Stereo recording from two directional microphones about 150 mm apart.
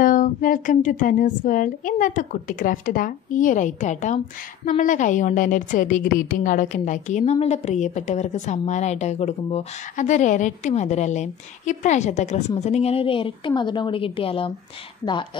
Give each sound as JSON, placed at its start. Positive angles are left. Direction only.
{"t": 0.0, "sound": "a woman's voice", "side_deg": 65}